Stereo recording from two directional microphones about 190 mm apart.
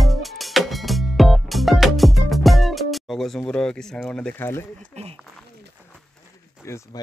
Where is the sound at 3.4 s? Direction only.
5° left (ahead or behind).